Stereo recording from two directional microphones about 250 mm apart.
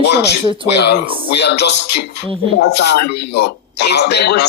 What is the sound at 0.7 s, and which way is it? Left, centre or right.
Speech, left.